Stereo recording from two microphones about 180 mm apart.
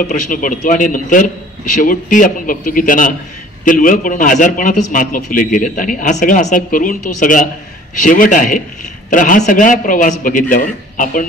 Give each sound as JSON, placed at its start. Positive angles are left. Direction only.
{"t": 0.1, "sound": "a man's voice", "side_deg": 50}